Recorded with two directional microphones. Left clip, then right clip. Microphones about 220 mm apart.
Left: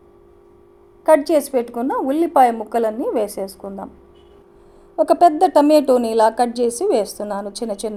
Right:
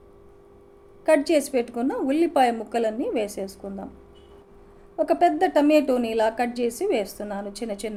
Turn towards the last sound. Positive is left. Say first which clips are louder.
# left 6 dB
turn(degrees=20)  # may be behind; listen again after turning